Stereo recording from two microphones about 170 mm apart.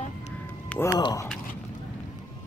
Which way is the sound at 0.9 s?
20° left (ahead or behind).